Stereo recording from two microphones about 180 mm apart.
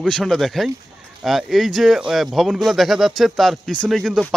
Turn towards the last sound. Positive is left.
turn(degrees=0)  # may be behind; listen again after turning